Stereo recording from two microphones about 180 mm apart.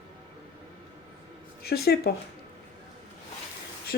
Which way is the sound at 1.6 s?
60° left (ahead or behind).